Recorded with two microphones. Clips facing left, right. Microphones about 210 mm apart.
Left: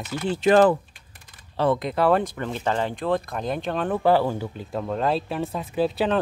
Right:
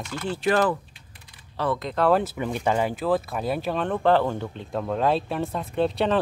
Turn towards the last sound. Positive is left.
turn(degrees=0)  # may be behind; listen again after turning